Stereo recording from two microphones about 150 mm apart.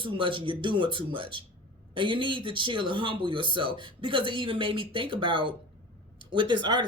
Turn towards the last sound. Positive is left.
turn(degrees=-30)  # may be behind; listen again after turning